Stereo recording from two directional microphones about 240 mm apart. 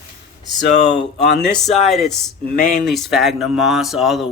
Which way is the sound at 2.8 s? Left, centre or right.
Centre.